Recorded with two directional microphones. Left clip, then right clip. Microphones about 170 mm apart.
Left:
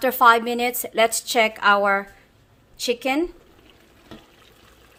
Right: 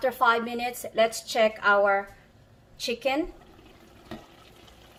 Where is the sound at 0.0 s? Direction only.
90° left.